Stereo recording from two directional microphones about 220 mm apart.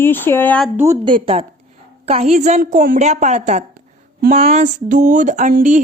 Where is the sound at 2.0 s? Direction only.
30° right (ahead or behind).